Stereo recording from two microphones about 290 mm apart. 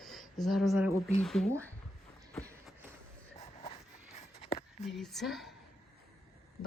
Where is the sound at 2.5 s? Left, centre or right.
Centre.